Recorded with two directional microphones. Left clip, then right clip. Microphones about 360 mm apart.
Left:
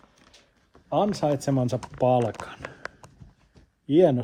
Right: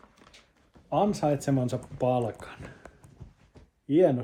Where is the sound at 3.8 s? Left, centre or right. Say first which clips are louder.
Left 3 dB; left.